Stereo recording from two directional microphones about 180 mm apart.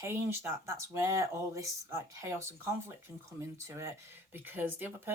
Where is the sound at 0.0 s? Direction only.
15° right (ahead or behind).